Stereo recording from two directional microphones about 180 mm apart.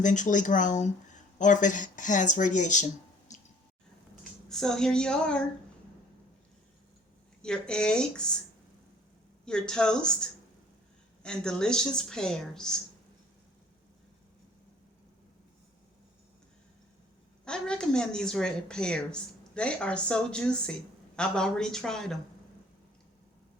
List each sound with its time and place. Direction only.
0.0 s speech: 45° left (ahead or behind)
3.3 s drip: 40° left (ahead or behind)
4.2 s speech: 5° left (ahead or behind)
7.4 s speech: 5° left (ahead or behind)
9.5 s speech: 5° left (ahead or behind)
17.4 s speech: 5° left (ahead or behind)